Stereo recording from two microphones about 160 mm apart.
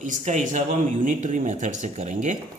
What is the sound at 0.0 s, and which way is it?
Speech, 50° right (ahead or behind).